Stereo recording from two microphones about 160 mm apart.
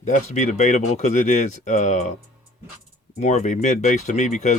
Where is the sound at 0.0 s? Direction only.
50° left (ahead or behind).